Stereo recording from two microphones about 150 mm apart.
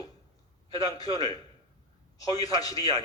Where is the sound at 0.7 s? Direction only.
25° left (ahead or behind).